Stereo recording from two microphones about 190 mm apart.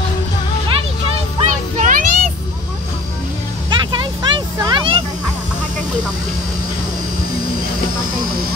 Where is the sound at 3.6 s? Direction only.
25° right (ahead or behind).